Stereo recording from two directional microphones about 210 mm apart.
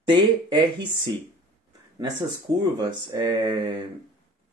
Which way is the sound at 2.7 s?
20° right (ahead or behind).